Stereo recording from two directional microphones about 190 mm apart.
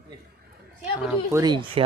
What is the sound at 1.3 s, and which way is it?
Speech, 20° right (ahead or behind).